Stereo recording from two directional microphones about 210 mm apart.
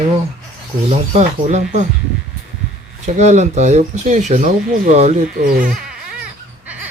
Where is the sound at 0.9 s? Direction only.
35° right (ahead or behind).